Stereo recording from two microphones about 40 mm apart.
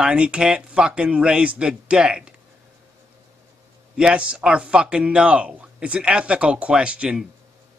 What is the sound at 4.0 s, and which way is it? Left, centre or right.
Speech, right.